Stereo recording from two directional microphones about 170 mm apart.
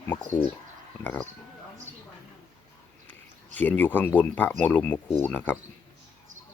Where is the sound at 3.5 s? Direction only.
10° left (ahead or behind).